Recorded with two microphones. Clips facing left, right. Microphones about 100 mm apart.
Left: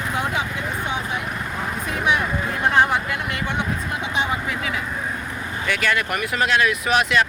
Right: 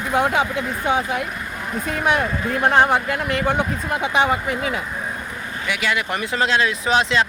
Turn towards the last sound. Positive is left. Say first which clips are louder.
# right 1 dB
turn(degrees=-25)  # may be behind; listen again after turning